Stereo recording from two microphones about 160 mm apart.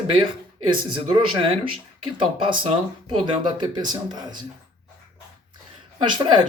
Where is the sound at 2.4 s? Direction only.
30° right (ahead or behind).